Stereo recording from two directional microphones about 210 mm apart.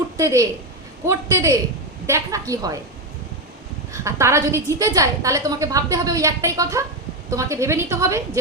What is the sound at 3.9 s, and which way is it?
A woman's voice, 15° right (ahead or behind).